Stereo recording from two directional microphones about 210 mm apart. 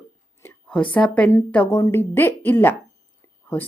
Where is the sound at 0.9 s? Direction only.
5° left (ahead or behind).